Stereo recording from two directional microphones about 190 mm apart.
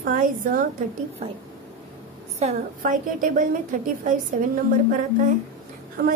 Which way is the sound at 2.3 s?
40° right (ahead or behind).